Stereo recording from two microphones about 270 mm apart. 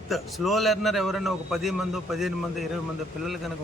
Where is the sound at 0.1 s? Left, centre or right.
Centre.